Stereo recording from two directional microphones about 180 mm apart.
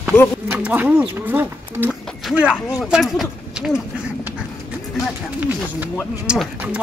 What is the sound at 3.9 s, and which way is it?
Dog, 5° right (ahead or behind).